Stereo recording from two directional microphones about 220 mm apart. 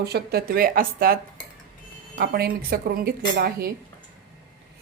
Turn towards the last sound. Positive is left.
turn(degrees=-40)  # may be behind; listen again after turning